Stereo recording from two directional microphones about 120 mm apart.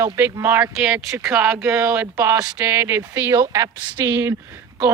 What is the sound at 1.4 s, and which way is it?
Speech, 10° right (ahead or behind).